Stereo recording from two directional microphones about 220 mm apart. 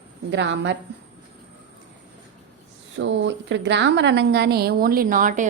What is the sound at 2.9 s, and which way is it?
A woman's voice, 55° right (ahead or behind).